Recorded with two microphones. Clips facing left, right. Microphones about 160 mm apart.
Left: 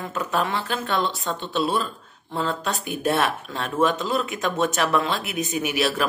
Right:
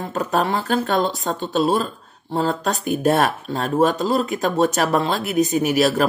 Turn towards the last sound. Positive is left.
turn(degrees=-40)  # may be behind; listen again after turning